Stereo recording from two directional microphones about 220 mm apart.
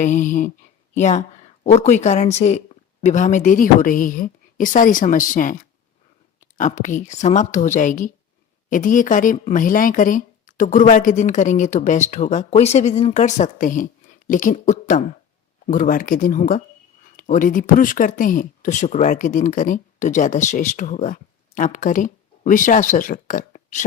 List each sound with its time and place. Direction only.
0.0 s speech: 35° left (ahead or behind)
6.6 s speech: 35° left (ahead or behind)